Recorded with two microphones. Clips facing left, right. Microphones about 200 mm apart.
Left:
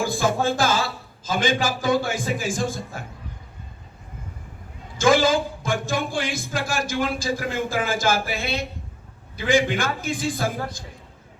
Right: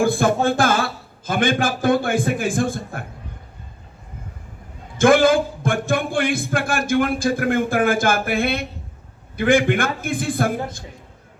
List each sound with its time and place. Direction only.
0.0 s a man's voice: 55° right (ahead or behind)
4.9 s a man's voice: 55° right (ahead or behind)